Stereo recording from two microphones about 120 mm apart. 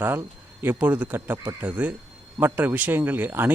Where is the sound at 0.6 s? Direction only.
15° right (ahead or behind).